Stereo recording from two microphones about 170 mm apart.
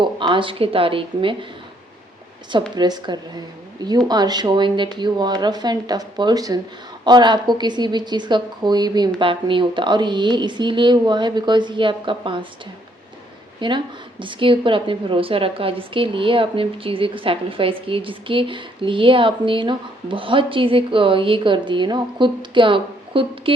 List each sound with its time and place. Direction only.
0.0 s speech: 30° right (ahead or behind)
2.5 s speech: 25° right (ahead or behind)
13.6 s a woman's voice: 30° right (ahead or behind)